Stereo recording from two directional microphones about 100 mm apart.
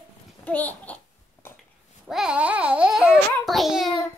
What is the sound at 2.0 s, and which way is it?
Babbling, 5° right (ahead or behind).